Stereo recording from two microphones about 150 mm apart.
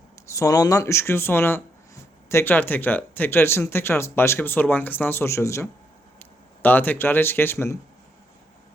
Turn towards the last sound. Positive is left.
turn(degrees=15)  # may be behind; listen again after turning